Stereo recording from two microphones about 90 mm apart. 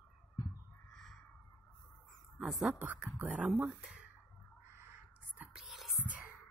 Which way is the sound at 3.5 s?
5° right (ahead or behind).